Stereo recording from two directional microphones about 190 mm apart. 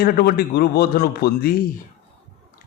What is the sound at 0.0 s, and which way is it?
A man's voice, 55° left (ahead or behind).